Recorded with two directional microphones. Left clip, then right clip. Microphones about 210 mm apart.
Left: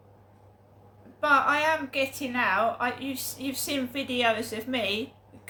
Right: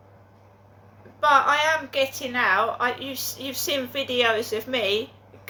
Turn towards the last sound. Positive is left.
turn(degrees=5)  # may be behind; listen again after turning